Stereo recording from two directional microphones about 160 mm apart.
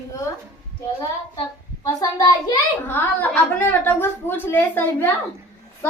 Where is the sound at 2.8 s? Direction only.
15° left (ahead or behind).